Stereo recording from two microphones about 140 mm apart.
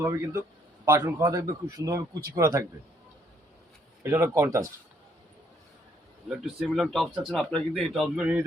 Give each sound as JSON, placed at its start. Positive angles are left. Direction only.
{"t": 0.0, "sound": "a man's voice", "side_deg": -20}
{"t": 4.0, "sound": "speech", "side_deg": -15}
{"t": 6.2, "sound": "speech", "side_deg": 0}
{"t": 8.2, "sound": "a man's voice", "side_deg": -10}